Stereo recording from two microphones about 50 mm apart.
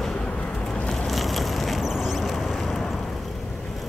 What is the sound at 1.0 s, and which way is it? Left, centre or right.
Vehicle, centre.